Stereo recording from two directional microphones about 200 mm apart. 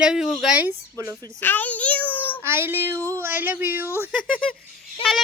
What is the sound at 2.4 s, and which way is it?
Speech, 10° right (ahead or behind).